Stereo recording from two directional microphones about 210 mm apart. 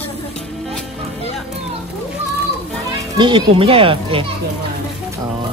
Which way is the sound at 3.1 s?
20° right (ahead or behind).